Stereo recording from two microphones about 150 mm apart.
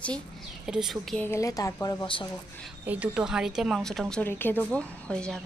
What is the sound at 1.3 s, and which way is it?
Speech, 20° left (ahead or behind).